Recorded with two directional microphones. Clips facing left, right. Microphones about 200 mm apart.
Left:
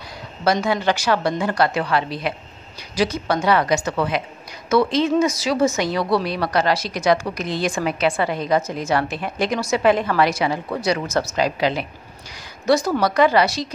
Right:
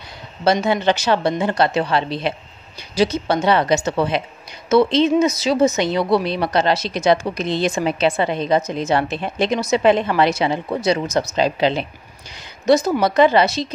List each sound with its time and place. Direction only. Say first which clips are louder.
0.4 s a woman's voice: right 2 dB; 25° right (ahead or behind)